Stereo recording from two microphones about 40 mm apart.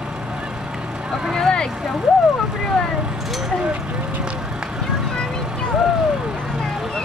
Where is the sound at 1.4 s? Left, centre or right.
Centre.